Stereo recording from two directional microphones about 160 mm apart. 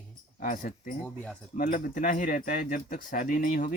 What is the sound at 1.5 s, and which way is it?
Speech, 60° left (ahead or behind).